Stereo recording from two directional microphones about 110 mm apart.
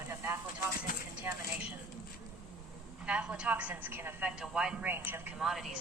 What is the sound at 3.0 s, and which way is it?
Speech, 10° right (ahead or behind).